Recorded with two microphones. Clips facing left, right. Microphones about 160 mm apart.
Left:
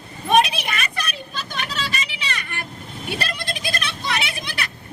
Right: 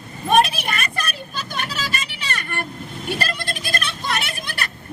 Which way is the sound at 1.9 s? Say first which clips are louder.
Even; 45° right (ahead or behind).